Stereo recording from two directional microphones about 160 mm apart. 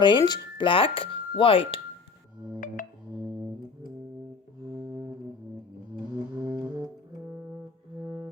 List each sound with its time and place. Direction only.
0.0 s speech: 25° left (ahead or behind)
2.8 s music: 55° left (ahead or behind)
3.2 s music: 15° right (ahead or behind)
6.3 s music: 10° right (ahead or behind)
8.0 s music: 20° right (ahead or behind)